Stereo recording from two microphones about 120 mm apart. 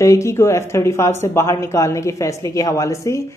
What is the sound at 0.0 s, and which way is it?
Speech, 25° left (ahead or behind).